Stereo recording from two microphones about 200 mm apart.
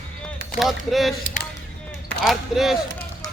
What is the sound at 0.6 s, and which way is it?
Speech, centre (ahead or behind).